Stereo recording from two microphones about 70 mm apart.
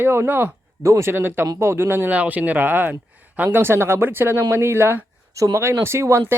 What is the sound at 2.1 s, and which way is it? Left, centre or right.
Speech, right.